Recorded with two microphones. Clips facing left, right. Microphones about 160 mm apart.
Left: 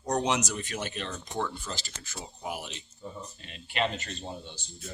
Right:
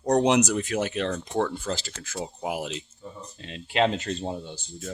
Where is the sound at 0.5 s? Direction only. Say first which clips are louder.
Right 9 dB; 90° right.